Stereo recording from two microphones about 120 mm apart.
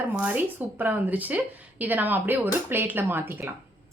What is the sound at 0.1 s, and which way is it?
Speech, 15° right (ahead or behind).